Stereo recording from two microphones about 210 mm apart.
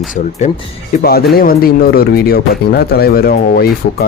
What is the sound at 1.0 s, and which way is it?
Speech, 50° left (ahead or behind).